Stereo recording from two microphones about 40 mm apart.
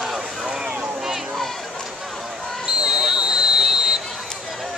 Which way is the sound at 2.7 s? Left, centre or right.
Centre.